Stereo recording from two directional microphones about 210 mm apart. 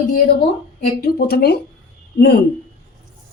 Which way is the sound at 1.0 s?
50° left (ahead or behind).